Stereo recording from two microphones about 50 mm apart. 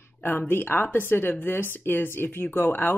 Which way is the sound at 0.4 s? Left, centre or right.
Left.